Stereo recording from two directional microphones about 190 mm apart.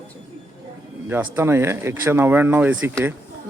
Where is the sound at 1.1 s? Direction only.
10° right (ahead or behind).